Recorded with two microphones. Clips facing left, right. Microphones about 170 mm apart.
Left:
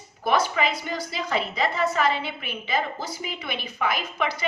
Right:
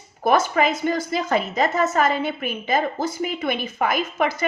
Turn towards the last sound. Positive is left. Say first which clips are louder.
# right 6 dB
turn(degrees=-45)  # may be behind; listen again after turning